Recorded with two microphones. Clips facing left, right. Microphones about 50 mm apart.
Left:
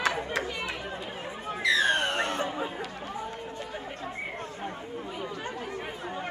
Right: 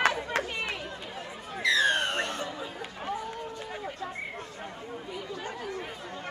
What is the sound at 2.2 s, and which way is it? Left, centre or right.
Chatter, centre.